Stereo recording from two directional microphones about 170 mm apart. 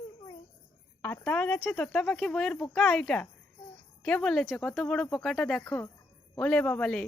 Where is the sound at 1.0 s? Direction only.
15° left (ahead or behind).